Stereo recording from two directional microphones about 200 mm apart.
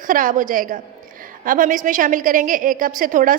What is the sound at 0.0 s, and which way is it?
A woman's voice, 40° right (ahead or behind).